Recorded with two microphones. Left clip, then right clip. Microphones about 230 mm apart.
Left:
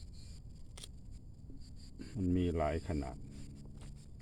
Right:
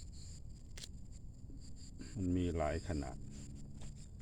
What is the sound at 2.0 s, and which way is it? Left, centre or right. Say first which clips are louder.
Speech: left 3 dB; left.